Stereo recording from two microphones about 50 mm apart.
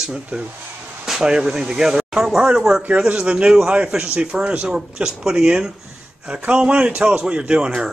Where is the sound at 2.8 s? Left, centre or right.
Right.